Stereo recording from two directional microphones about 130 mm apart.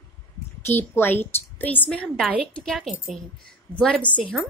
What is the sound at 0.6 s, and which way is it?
A woman's voice, 15° left (ahead or behind).